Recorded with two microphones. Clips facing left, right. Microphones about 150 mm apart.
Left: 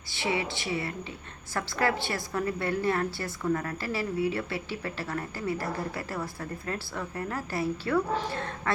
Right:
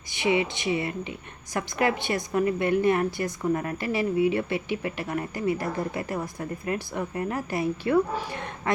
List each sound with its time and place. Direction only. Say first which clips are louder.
0.1 s a woman's voice: right 6 dB; 15° right (ahead or behind)